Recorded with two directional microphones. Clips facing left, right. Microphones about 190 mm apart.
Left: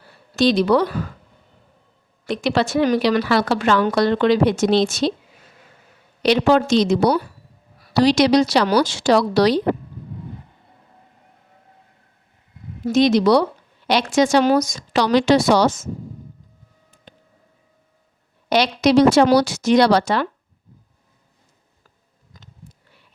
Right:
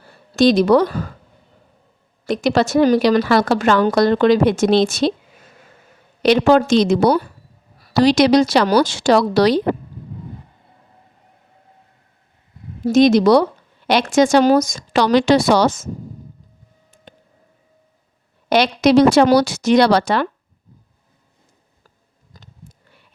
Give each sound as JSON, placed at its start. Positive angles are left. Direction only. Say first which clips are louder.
{"t": 0.3, "sound": "a woman's voice", "louder": "right 3 dB", "side_deg": -45}
{"t": 2.2, "sound": "a woman's voice", "louder": "right 3 dB", "side_deg": -45}
{"t": 6.2, "sound": "a woman's voice", "louder": "right 3 dB", "side_deg": -50}
{"t": 12.8, "sound": "a woman's voice", "louder": "right 3 dB", "side_deg": -45}
{"t": 17.1, "sound": "siren", "louder": "right 3 dB", "side_deg": -50}
{"t": 18.4, "sound": "a woman's voice", "louder": "right 2 dB", "side_deg": -55}